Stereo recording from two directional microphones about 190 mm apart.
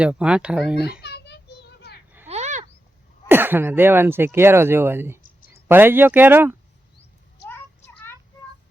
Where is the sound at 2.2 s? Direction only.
35° right (ahead or behind).